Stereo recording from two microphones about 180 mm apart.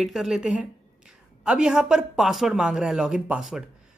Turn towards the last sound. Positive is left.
turn(degrees=-5)  # may be behind; listen again after turning